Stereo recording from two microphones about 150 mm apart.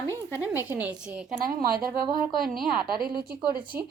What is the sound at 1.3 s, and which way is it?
Speech, 75° right (ahead or behind).